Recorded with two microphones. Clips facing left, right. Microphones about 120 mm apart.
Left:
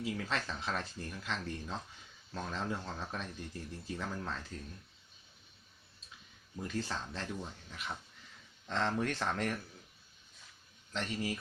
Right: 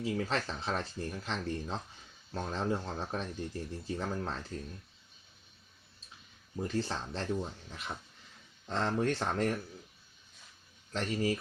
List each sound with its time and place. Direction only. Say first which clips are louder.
0.0 s speech: right 4 dB; 30° right (ahead or behind)
6.6 s speech: right 4 dB; 30° right (ahead or behind)
10.9 s speech: right 5 dB; 40° right (ahead or behind)